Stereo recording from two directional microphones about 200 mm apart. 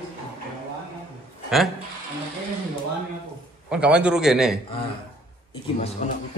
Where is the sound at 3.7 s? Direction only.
5° right (ahead or behind).